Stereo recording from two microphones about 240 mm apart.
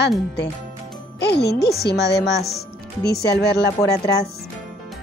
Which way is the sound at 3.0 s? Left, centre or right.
Centre.